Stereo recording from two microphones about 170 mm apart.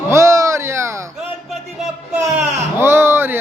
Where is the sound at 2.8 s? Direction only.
15° right (ahead or behind).